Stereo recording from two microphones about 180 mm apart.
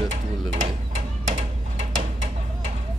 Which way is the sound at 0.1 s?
40° right (ahead or behind).